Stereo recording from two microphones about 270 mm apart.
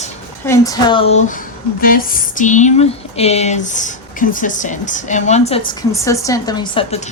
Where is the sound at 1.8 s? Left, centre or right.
Left.